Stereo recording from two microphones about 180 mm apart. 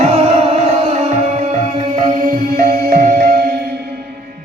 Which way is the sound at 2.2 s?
55° right (ahead or behind).